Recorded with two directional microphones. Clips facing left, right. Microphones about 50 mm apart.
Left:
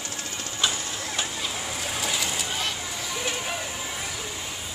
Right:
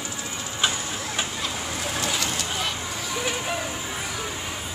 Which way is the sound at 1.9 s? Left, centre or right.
Centre.